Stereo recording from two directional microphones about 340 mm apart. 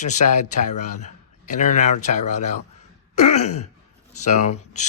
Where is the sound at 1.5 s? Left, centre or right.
Left.